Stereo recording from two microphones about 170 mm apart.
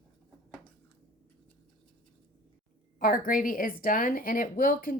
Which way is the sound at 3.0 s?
55° left (ahead or behind).